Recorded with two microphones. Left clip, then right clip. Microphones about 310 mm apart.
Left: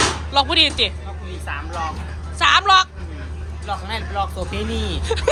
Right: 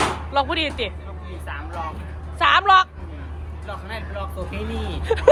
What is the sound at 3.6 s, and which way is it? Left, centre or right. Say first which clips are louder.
Speech: left 6 dB; centre.